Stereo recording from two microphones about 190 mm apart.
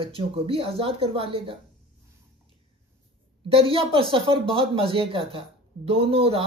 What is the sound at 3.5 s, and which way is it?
Speech, 30° right (ahead or behind).